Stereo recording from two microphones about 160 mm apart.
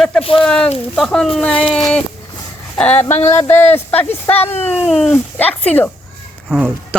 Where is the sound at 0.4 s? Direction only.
5° left (ahead or behind).